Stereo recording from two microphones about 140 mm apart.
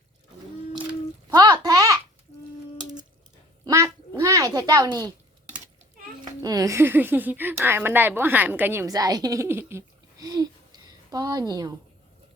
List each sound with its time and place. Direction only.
1.3 s a sound: 30° right (ahead or behind)
3.6 s quack: 20° right (ahead or behind)
6.4 s speech: 25° right (ahead or behind)